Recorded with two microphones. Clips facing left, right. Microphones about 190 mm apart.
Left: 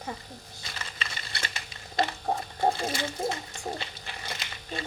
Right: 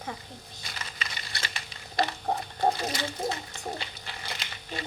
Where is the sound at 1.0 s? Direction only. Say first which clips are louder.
Left 1 dB; 30° left (ahead or behind).